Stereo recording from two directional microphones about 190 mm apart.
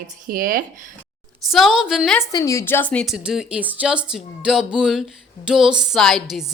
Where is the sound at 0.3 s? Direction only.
45° right (ahead or behind).